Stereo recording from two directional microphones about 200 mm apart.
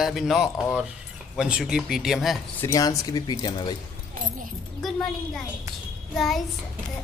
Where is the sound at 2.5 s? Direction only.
15° left (ahead or behind).